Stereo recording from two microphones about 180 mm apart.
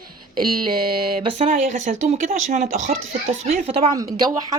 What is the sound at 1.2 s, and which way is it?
Speech, 40° right (ahead or behind).